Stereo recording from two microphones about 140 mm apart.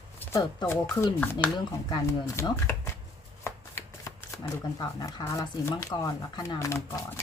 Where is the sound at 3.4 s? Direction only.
20° left (ahead or behind).